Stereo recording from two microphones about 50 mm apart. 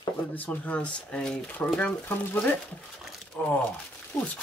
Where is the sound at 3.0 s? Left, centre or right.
Centre.